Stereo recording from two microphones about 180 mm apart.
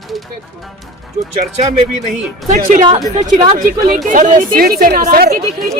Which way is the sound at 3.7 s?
50° right (ahead or behind).